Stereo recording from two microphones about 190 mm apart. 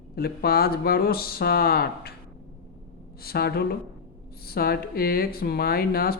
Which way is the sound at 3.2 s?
55° left (ahead or behind).